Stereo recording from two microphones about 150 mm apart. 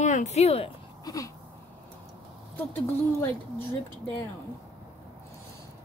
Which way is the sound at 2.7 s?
15° left (ahead or behind).